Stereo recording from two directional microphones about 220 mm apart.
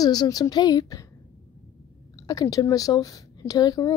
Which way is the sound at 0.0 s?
15° left (ahead or behind).